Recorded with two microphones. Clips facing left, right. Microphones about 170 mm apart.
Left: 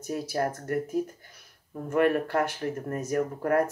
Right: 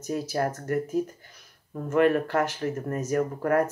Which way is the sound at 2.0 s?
45° right (ahead or behind).